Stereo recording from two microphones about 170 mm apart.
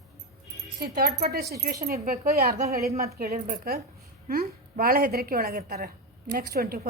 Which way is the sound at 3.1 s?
65° right (ahead or behind).